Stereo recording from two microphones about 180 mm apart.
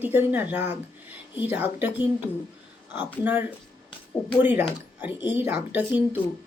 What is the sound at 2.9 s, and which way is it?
Speech, 10° right (ahead or behind).